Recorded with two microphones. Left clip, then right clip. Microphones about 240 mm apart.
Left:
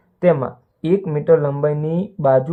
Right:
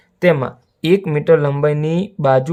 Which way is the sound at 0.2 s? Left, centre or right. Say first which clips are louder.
Right 1 dB; right.